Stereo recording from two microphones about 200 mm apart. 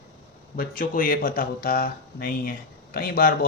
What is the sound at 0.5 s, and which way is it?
Speech, 45° left (ahead or behind).